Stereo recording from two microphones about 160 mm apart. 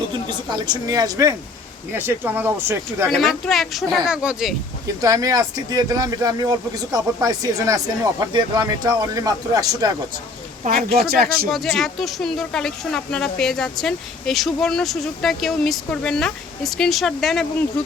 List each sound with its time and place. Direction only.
0.3 s speech: 25° right (ahead or behind)
3.1 s speech: centre (ahead or behind)
5.0 s speech: 20° right (ahead or behind)
10.9 s speech: 75° right (ahead or behind)
11.5 s speech: centre (ahead or behind)